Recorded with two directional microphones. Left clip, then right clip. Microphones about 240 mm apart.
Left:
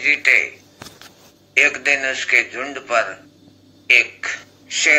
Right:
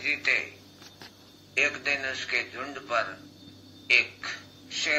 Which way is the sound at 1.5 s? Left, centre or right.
Left.